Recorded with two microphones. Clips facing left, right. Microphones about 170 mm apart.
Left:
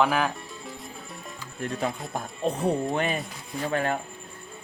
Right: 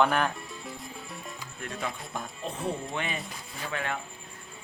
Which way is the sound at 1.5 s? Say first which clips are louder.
Left 7 dB; 40° left (ahead or behind).